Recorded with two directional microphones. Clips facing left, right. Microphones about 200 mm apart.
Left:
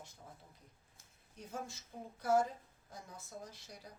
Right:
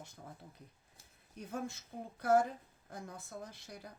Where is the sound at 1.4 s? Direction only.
60° right (ahead or behind).